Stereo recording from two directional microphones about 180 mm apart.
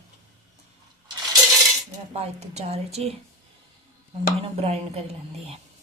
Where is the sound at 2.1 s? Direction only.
35° right (ahead or behind).